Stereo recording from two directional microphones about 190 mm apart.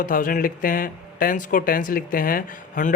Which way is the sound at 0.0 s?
45° left (ahead or behind).